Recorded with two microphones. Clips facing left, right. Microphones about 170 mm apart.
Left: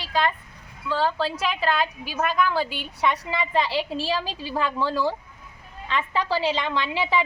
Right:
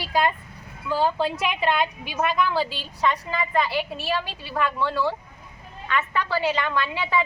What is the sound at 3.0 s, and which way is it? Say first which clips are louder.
Speech: even; 15° left (ahead or behind).